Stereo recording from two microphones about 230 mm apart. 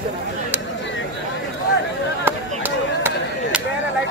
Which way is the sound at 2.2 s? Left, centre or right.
Centre.